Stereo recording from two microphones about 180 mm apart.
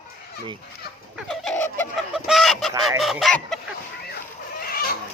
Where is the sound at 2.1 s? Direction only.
Centre (ahead or behind).